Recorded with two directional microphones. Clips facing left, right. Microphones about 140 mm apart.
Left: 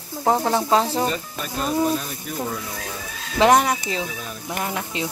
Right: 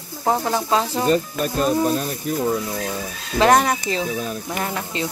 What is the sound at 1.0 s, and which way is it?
Speech, 45° right (ahead or behind).